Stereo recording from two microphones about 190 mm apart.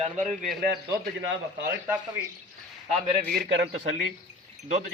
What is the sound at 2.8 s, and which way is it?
Speech, 30° right (ahead or behind).